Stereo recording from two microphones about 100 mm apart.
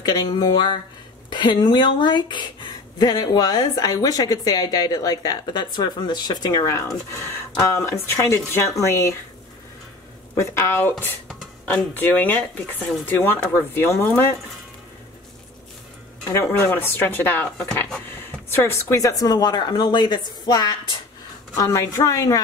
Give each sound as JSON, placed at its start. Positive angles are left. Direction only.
{"t": 0.0, "sound": "speech", "side_deg": 45}
{"t": 10.3, "sound": "speech", "side_deg": 25}
{"t": 16.3, "sound": "speech", "side_deg": 25}
{"t": 21.5, "sound": "speech", "side_deg": 30}